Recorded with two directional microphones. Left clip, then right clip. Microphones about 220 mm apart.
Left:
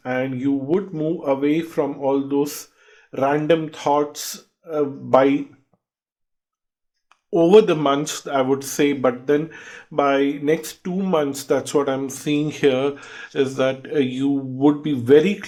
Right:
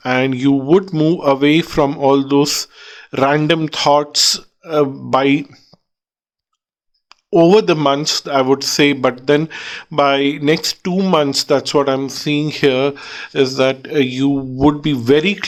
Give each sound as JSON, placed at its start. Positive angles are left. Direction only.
{"t": 0.0, "sound": "speech", "side_deg": -45}
{"t": 7.1, "sound": "speech", "side_deg": -35}